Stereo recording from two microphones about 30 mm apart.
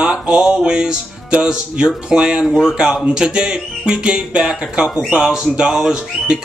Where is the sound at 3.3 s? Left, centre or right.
Right.